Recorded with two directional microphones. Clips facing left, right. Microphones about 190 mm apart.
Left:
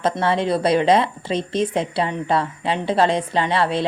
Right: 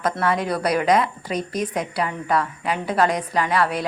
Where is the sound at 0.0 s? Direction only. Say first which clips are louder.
Left 2 dB; 25° left (ahead or behind).